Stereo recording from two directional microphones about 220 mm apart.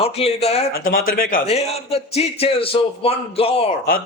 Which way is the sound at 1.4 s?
25° left (ahead or behind).